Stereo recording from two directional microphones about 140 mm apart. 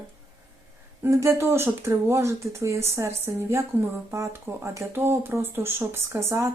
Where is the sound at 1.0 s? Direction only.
20° right (ahead or behind).